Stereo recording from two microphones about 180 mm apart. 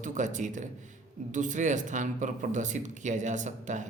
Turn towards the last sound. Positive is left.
turn(degrees=-45)  # may be behind; listen again after turning